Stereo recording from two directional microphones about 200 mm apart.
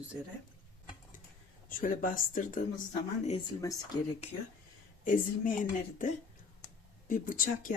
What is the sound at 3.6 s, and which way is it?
Speech, 15° left (ahead or behind).